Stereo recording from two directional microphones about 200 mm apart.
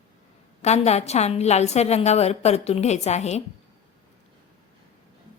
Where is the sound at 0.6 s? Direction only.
35° left (ahead or behind).